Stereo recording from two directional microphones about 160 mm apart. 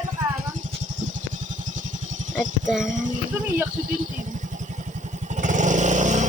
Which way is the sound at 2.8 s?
50° right (ahead or behind).